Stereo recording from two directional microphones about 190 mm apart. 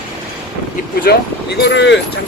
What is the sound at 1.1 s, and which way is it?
Speech, 55° left (ahead or behind).